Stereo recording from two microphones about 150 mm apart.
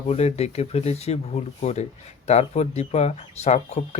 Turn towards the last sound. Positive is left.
turn(degrees=45)  # may be behind; listen again after turning